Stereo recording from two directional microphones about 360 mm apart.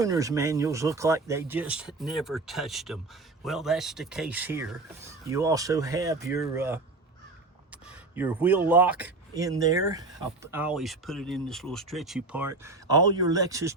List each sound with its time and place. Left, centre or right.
0.0 s speech: centre